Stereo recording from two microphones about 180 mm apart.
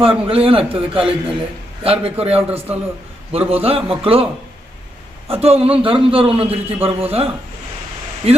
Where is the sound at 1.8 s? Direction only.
30° right (ahead or behind).